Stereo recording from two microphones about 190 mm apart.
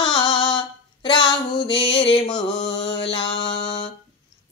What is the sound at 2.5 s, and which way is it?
Mantra, 70° left (ahead or behind).